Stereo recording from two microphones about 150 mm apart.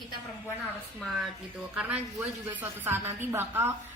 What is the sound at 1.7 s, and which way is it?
A woman's voice, 10° right (ahead or behind).